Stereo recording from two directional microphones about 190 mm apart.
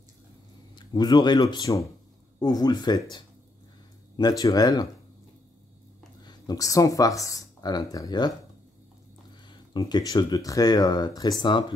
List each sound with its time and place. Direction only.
0.7 s speech: 20° left (ahead or behind)
6.2 s speech: 20° left (ahead or behind)
9.5 s speech: 20° left (ahead or behind)